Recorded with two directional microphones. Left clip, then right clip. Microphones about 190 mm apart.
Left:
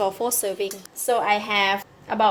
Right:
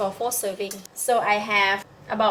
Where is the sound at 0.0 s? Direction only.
45° left (ahead or behind).